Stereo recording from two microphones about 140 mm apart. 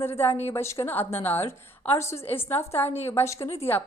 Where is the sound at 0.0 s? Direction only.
15° left (ahead or behind).